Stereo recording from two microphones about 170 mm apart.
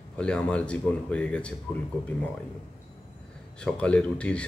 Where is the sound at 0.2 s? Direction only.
5° left (ahead or behind).